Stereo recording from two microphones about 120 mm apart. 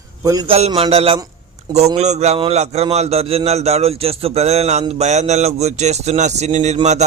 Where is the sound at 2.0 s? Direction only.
65° right (ahead or behind).